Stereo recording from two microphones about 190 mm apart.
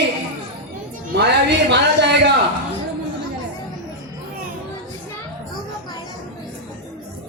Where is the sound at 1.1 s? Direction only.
65° right (ahead or behind).